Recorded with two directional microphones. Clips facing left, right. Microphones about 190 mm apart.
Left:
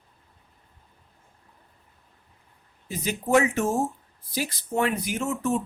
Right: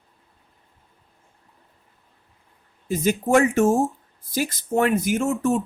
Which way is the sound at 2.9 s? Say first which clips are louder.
Right 4 dB; 45° right (ahead or behind).